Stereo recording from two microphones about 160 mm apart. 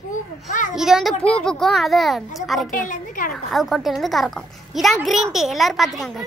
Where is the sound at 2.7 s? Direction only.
60° left (ahead or behind).